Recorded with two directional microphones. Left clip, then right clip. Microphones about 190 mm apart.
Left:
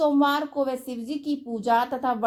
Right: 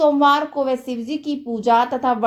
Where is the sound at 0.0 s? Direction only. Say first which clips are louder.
Right 7 dB; 45° left (ahead or behind).